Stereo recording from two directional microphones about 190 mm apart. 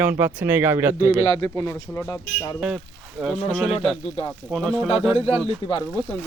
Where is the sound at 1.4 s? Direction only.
15° left (ahead or behind).